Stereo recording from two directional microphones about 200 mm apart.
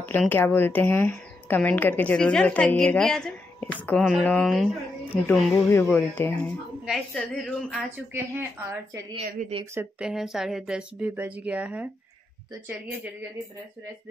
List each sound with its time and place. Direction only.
0.0 s speech: 10° left (ahead or behind)
5.7 s speech: 10° left (ahead or behind)
8.1 s a woman's voice: 10° right (ahead or behind)
9.1 s a woman's voice: 30° right (ahead or behind)
9.8 s speech: 5° right (ahead or behind)